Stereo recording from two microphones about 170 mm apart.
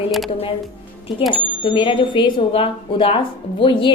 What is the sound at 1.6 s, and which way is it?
A woman's voice, 30° left (ahead or behind).